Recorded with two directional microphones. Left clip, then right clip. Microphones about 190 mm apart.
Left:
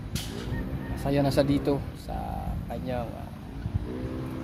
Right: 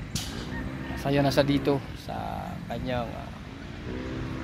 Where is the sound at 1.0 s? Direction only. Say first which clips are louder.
Right 1 dB; 10° right (ahead or behind).